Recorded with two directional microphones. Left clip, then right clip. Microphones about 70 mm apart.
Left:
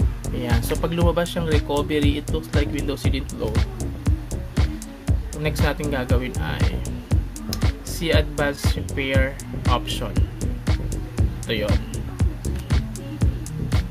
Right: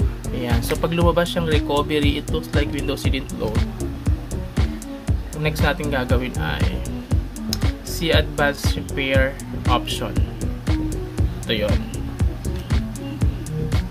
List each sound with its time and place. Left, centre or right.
0.4 s speech: centre
2.9 s speech: centre
4.6 s speech: centre
6.7 s music: centre
8.0 s speech: centre
9.8 s music: centre